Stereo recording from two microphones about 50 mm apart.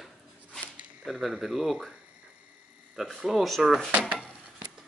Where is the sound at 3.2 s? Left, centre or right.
Centre.